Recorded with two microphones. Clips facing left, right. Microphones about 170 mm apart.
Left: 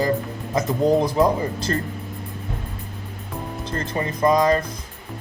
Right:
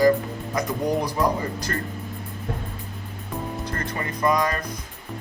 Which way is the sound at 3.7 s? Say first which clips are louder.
Left 4 dB; 25° left (ahead or behind).